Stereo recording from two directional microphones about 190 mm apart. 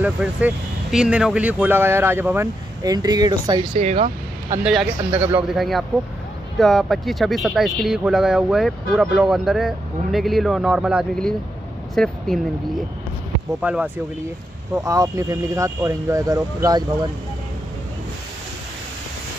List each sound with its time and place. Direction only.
0.0 s speech: 10° right (ahead or behind); by 4.6 s 40° right (ahead or behind)
4.6 s speech: 5° right (ahead or behind)
5.6 s speech: centre (ahead or behind)
13.6 s speech: 5° right (ahead or behind)
14.8 s speech: 15° right (ahead or behind)